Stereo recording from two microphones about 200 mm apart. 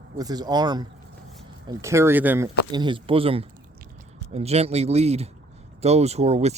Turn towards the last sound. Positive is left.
turn(degrees=-30)  # may be behind; listen again after turning